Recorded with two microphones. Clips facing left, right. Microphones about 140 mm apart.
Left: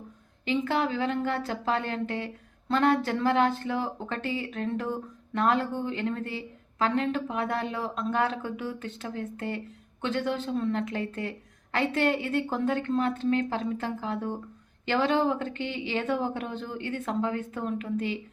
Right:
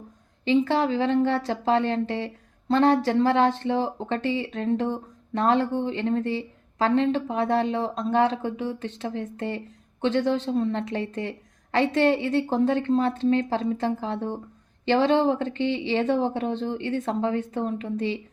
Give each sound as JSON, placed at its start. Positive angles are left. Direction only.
{"t": 0.4, "sound": "speech", "side_deg": -30}